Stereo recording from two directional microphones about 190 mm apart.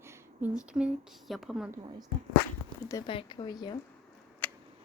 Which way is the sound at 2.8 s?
15° left (ahead or behind).